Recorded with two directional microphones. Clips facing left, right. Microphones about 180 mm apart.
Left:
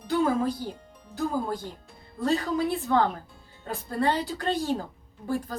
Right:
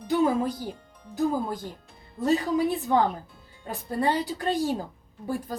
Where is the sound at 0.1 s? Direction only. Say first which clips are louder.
Right 1 dB; 15° right (ahead or behind).